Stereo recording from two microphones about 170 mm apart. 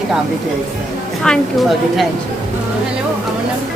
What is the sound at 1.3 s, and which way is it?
Speech, 5° left (ahead or behind).